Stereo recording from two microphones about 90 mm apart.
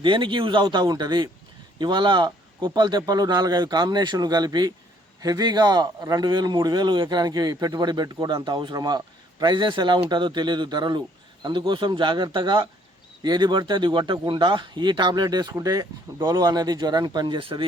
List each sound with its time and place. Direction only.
0.0 s a man's voice: 65° right (ahead or behind)
15.5 s a man's voice: 40° right (ahead or behind); by 17.7 s 70° right (ahead or behind)